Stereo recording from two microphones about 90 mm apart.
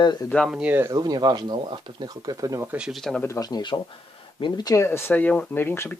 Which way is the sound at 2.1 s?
45° right (ahead or behind).